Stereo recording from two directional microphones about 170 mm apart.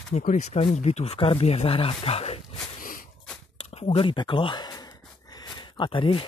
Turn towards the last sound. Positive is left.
turn(degrees=30)  # may be behind; listen again after turning